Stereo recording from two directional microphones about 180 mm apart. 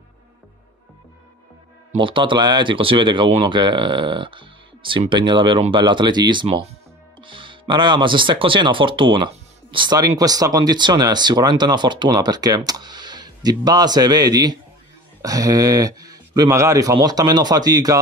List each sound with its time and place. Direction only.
1.9 s speech: 30° right (ahead or behind)